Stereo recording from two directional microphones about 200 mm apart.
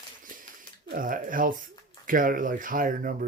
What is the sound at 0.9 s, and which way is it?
Speech, 45° right (ahead or behind).